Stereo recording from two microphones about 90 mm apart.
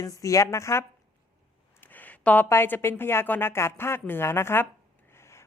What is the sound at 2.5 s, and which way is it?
A woman's voice, 25° left (ahead or behind).